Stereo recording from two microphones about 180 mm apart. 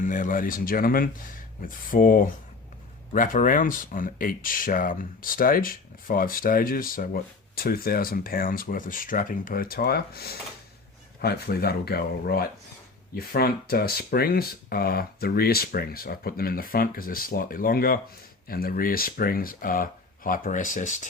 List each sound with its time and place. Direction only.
0.0 s speech: 45° left (ahead or behind)